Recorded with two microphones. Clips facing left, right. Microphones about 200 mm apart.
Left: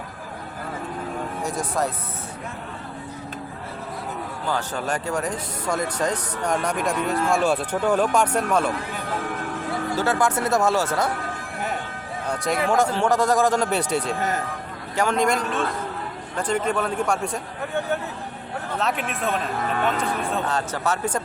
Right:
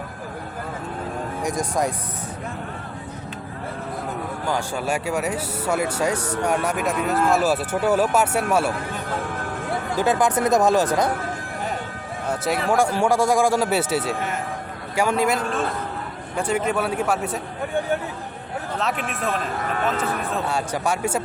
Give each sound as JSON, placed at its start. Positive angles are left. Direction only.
{"t": 1.4, "sound": "speech", "side_deg": -15}
{"t": 4.4, "sound": "speech", "side_deg": -10}
{"t": 9.9, "sound": "speech", "side_deg": -15}
{"t": 12.3, "sound": "speech", "side_deg": -5}
{"t": 18.8, "sound": "speech", "side_deg": 0}